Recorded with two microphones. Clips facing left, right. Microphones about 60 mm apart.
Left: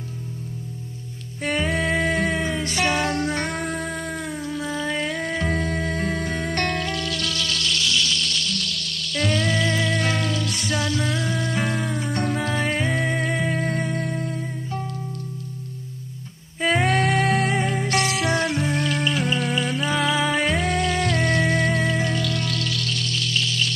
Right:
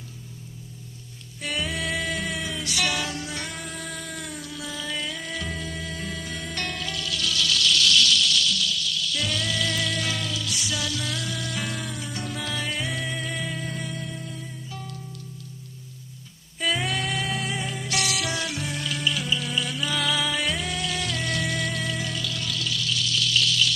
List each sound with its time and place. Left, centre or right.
1.4 s music: left
8.2 s music: left
16.6 s music: left
22.1 s music: left